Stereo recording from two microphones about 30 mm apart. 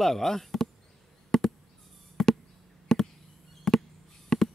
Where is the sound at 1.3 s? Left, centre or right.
Centre.